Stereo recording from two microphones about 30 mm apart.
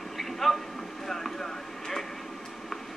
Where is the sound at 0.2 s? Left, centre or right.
Centre.